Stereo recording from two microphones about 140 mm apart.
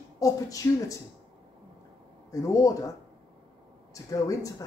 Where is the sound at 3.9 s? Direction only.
25° left (ahead or behind).